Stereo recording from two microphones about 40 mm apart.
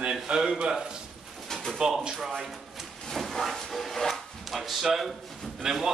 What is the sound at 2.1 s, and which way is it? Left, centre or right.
Speech, centre.